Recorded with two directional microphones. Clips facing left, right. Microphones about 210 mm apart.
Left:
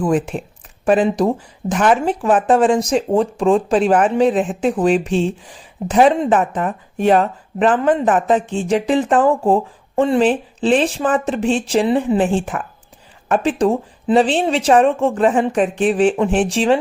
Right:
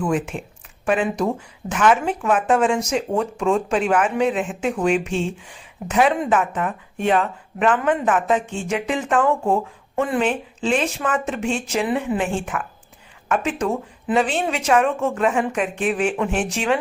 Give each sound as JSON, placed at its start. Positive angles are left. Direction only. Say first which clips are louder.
{"t": 0.0, "sound": "speech", "louder": "left 5 dB", "side_deg": 35}